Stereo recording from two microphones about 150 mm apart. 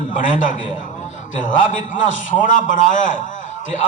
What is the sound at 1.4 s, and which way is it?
A man's voice, 60° left (ahead or behind).